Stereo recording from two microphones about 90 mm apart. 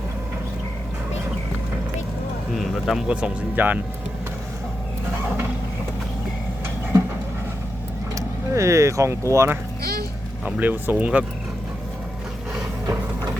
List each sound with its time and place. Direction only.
2.6 s vehicle: centre (ahead or behind)
3.1 s speech: 10° right (ahead or behind)
5.1 s a sound: 25° right (ahead or behind)
8.1 s speech: 35° right (ahead or behind)
10.4 s speech: 20° right (ahead or behind)